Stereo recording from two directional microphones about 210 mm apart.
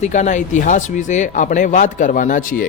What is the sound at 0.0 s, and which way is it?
Speech, 35° left (ahead or behind).